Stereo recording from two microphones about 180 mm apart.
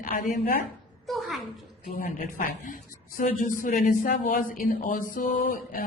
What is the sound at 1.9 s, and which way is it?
A man's voice, 50° left (ahead or behind).